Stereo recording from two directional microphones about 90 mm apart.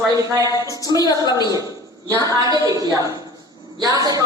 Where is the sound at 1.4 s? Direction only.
40° right (ahead or behind).